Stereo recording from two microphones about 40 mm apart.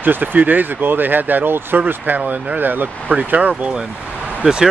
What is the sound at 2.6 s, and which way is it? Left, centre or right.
Speech, right.